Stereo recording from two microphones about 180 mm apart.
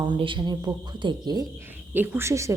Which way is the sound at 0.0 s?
25° right (ahead or behind).